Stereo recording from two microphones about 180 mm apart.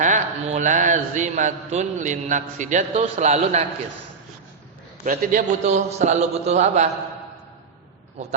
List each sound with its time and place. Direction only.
0.0 s a man's voice: 45° right (ahead or behind)
5.0 s a man's voice: 45° right (ahead or behind)